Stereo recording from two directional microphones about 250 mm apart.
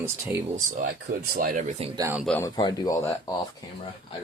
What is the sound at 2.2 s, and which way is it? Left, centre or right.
Speech, centre.